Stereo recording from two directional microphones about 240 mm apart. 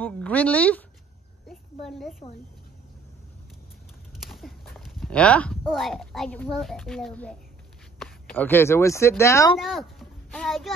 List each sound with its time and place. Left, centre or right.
0.0 s speech: centre
1.5 s a sound: centre
4.2 s speech: centre
9.6 s a child's voice: centre